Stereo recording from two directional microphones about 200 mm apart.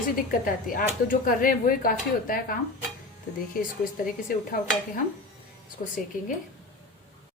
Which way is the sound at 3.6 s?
45° left (ahead or behind).